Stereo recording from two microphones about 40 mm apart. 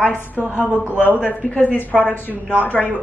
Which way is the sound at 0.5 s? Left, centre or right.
Right.